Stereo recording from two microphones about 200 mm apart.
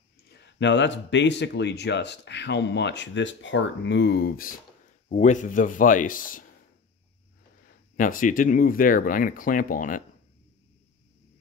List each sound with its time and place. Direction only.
0.3 s a man's voice: 60° left (ahead or behind); by 6.4 s 45° left (ahead or behind)
7.6 s speech: 45° left (ahead or behind)